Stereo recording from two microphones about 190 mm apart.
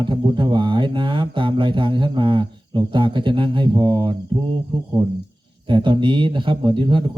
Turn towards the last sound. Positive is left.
turn(degrees=-25)  # may be behind; listen again after turning